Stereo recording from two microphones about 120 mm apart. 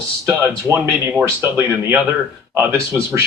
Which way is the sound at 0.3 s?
20° right (ahead or behind).